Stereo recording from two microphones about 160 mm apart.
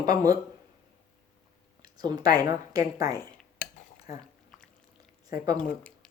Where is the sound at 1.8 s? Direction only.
25° right (ahead or behind).